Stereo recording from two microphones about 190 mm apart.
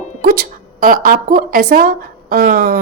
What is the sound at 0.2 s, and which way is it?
A woman's voice, 50° right (ahead or behind).